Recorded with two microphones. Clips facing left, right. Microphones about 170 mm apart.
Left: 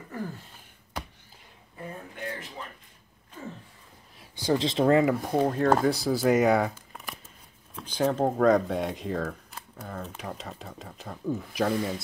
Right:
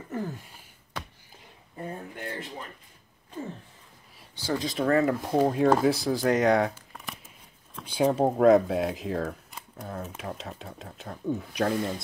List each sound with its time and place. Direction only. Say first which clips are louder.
0.1 s a sound: right 3 dB; 20° right (ahead or behind)
4.4 s speech: left 4 dB; 20° left (ahead or behind)
5.0 s speech: right 1 dB; centre (ahead or behind)
7.8 s speech: right 2 dB; 10° right (ahead or behind)